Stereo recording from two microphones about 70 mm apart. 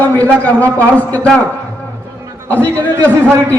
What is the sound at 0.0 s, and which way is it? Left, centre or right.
Speech, left.